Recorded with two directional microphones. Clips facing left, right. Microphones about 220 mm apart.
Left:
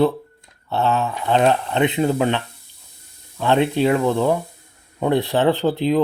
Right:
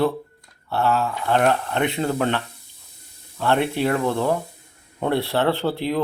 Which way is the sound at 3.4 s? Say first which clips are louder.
Left 3 dB; 15° left (ahead or behind).